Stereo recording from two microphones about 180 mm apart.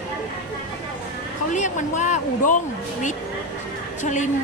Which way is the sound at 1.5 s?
40° left (ahead or behind).